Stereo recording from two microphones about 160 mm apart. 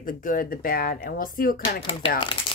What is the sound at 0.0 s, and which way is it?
Speech, 60° left (ahead or behind).